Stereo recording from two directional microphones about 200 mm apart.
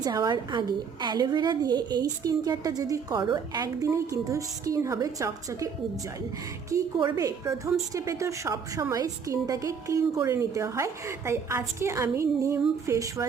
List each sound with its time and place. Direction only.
0.0 s a woman's voice: 20° right (ahead or behind)
6.7 s a woman's voice: 15° right (ahead or behind)